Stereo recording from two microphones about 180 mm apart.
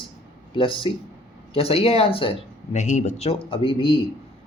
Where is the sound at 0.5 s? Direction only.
30° left (ahead or behind).